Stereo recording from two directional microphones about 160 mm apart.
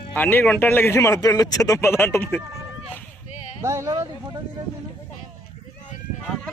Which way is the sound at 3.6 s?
20° right (ahead or behind).